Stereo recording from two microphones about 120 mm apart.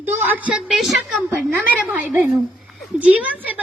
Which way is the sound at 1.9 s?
15° right (ahead or behind).